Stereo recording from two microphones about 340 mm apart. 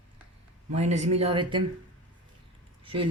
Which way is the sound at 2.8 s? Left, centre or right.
Centre.